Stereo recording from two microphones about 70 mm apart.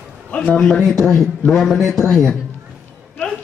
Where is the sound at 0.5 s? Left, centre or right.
Centre.